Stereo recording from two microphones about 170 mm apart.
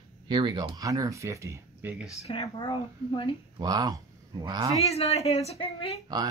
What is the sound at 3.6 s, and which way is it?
Speech, 25° right (ahead or behind).